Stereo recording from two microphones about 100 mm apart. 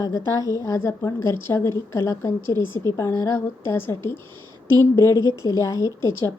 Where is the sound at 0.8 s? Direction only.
30° left (ahead or behind).